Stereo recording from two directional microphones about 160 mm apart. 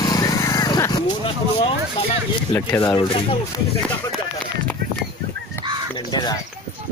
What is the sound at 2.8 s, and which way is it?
Speech, 30° left (ahead or behind).